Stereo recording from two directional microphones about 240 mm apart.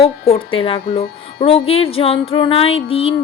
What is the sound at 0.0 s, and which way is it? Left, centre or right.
Music, left.